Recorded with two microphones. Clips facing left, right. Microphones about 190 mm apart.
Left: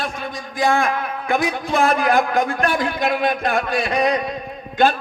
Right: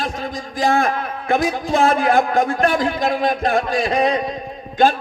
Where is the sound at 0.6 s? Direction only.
35° right (ahead or behind).